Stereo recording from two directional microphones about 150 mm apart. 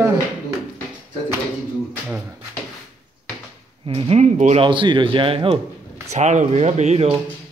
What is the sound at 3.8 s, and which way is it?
Speech, 45° right (ahead or behind).